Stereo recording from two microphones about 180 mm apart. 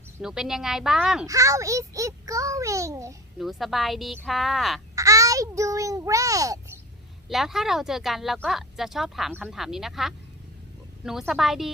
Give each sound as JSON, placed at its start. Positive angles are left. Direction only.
{"t": 0.2, "sound": "speech", "side_deg": -5}
{"t": 1.3, "sound": "a child's voice", "side_deg": -20}
{"t": 3.3, "sound": "speech", "side_deg": 0}
{"t": 4.9, "sound": "a sound", "side_deg": -20}
{"t": 7.3, "sound": "speech", "side_deg": 0}